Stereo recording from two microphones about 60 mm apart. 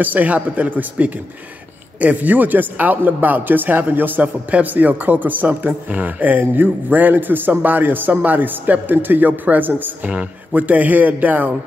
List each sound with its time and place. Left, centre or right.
0.0 s speech: right